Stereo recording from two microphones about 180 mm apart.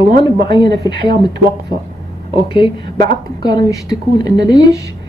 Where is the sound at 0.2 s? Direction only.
25° left (ahead or behind).